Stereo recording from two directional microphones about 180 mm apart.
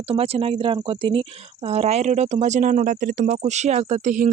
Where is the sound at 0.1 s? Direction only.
35° right (ahead or behind).